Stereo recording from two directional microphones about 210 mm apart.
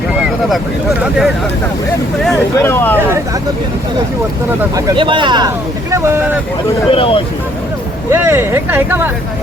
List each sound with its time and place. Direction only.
0.2 s speech: centre (ahead or behind)
2.3 s speech: 10° left (ahead or behind)
4.7 s speech: 20° right (ahead or behind)
6.9 s speech: 25° left (ahead or behind)
8.1 s speech: 10° right (ahead or behind)